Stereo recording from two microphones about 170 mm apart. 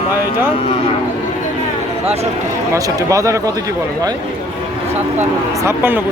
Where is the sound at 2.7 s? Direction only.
20° right (ahead or behind).